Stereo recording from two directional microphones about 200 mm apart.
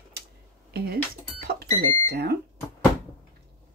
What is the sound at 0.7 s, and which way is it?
Speech, 50° right (ahead or behind).